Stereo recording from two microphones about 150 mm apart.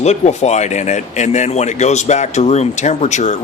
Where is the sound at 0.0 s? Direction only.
50° left (ahead or behind).